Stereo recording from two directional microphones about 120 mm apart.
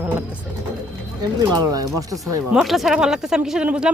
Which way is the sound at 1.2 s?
35° right (ahead or behind).